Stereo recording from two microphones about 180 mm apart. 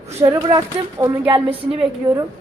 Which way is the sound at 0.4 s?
20° right (ahead or behind).